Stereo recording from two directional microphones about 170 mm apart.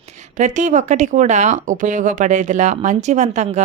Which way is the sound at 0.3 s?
45° right (ahead or behind).